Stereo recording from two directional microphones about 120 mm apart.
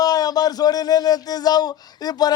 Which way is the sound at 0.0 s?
30° left (ahead or behind).